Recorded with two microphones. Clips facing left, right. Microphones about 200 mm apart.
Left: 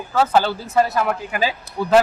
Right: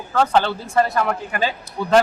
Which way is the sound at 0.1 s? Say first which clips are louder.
Even; 5° left (ahead or behind).